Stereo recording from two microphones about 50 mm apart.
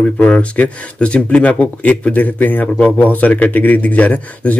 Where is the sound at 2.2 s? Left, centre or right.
Left.